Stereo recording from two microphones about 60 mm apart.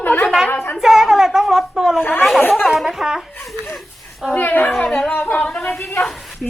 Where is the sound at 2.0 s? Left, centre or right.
Left.